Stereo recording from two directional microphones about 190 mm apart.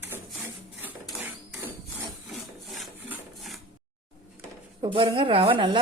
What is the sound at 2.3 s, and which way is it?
Wood, centre (ahead or behind).